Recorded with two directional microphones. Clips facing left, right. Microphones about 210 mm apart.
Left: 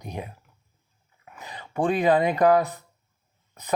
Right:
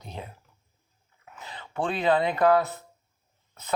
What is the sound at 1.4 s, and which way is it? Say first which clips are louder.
Speech: left 4 dB; 15° left (ahead or behind).